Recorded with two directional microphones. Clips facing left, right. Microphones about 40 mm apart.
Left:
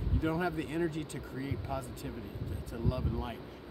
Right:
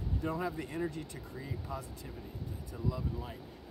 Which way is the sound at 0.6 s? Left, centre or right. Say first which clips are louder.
Left 4 dB; left.